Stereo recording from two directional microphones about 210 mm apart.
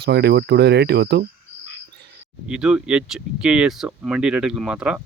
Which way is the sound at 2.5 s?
5° right (ahead or behind).